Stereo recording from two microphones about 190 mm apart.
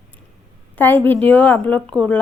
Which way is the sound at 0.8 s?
10° left (ahead or behind).